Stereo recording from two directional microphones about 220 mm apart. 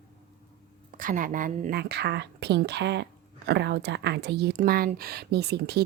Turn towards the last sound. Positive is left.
turn(degrees=-50)  # may be behind; listen again after turning